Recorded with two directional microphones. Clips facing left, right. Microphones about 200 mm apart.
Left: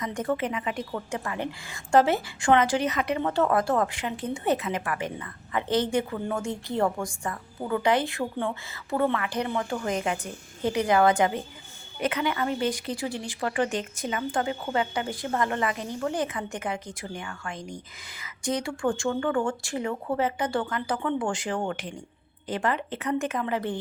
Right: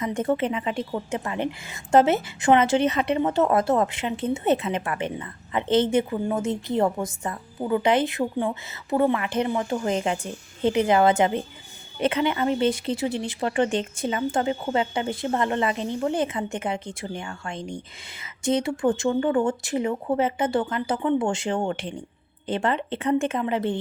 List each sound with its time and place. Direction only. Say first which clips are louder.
0.0 s a woman's voice: right 4 dB; 25° right (ahead or behind)